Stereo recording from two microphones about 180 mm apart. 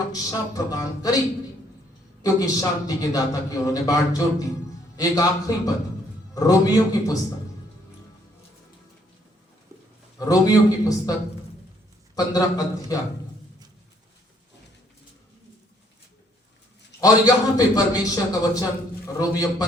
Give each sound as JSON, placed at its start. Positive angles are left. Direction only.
{"t": 0.1, "sound": "speech", "side_deg": 20}
{"t": 2.2, "sound": "a man's voice", "side_deg": 20}
{"t": 10.2, "sound": "a man's voice", "side_deg": 20}
{"t": 12.1, "sound": "a man's voice", "side_deg": 20}
{"t": 17.0, "sound": "a man's voice", "side_deg": 20}